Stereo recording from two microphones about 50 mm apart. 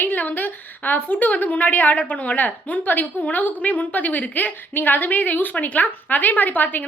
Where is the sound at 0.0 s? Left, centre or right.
Left.